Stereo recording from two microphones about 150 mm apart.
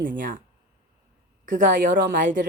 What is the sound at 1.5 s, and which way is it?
Speech, 60° right (ahead or behind).